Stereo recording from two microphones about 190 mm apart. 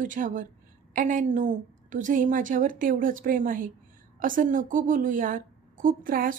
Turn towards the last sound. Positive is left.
turn(degrees=-45)  # may be behind; listen again after turning